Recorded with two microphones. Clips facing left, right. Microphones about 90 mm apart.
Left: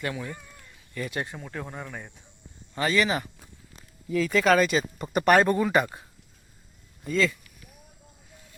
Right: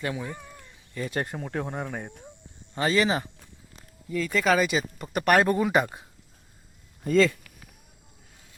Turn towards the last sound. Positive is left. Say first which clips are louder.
# right 4 dB
turn(degrees=-50)  # may be behind; listen again after turning